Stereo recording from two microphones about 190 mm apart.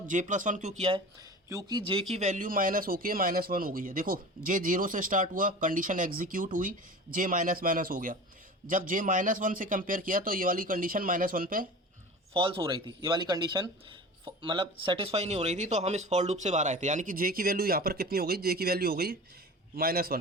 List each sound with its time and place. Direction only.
0.1 s speech: 40° right (ahead or behind)
1.2 s speech: 15° right (ahead or behind); by 11.7 s 45° right (ahead or behind)
12.3 s speech: 25° right (ahead or behind); by 20.1 s 55° right (ahead or behind)